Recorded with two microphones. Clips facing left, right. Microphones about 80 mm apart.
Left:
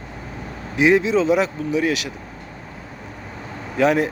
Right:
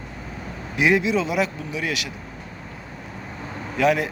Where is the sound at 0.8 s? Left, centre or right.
Left.